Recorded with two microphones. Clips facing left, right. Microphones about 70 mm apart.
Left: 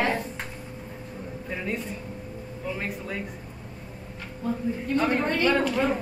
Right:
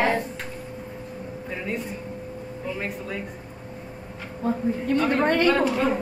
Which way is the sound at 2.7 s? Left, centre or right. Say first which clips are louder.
Right 2 dB; centre.